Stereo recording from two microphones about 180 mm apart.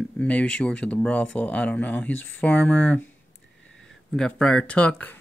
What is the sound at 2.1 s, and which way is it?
Speech, 90° left.